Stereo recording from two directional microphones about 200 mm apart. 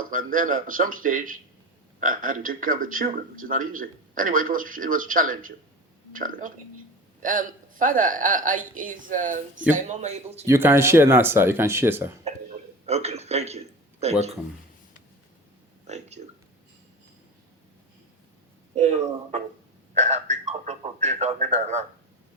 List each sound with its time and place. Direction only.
0.1 s speech: 45° right (ahead or behind)
10.4 s speech: 15° right (ahead or behind)
12.8 s speech: 30° right (ahead or behind)
15.9 s speech: 35° right (ahead or behind)
18.7 s speech: 35° right (ahead or behind)
19.9 s telephone: 35° right (ahead or behind)